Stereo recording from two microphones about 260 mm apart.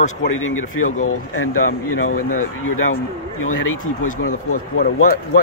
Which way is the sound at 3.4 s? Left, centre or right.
Left.